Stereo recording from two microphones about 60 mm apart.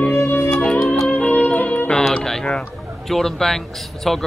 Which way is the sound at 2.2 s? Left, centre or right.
Centre.